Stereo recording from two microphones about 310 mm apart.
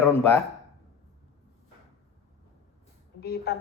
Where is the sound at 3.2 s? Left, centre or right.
Left.